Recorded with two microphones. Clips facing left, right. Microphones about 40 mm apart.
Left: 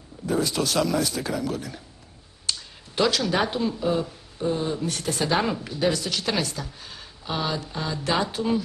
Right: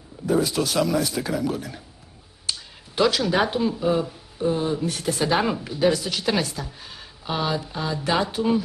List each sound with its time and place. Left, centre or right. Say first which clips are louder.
0.3 s speech: right 2 dB; centre